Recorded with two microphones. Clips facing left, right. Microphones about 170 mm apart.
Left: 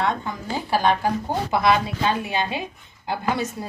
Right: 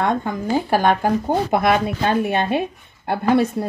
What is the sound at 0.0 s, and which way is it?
A woman's voice, 50° right (ahead or behind).